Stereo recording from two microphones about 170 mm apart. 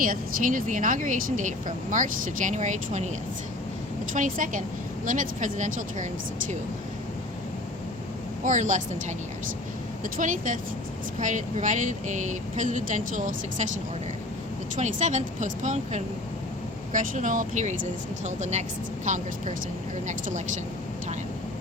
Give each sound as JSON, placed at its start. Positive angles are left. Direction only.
{"t": 0.0, "sound": "a woman's voice", "side_deg": -55}
{"t": 4.1, "sound": "a woman's voice", "side_deg": -50}
{"t": 8.4, "sound": "a woman's voice", "side_deg": -45}
{"t": 14.8, "sound": "a woman's voice", "side_deg": -45}